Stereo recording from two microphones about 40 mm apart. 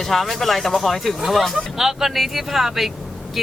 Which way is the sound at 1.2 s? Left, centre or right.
Centre.